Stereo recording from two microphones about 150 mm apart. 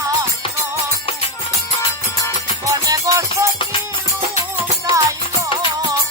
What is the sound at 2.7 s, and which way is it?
Music, 20° right (ahead or behind).